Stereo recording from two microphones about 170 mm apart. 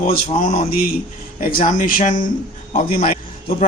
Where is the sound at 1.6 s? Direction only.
50° left (ahead or behind).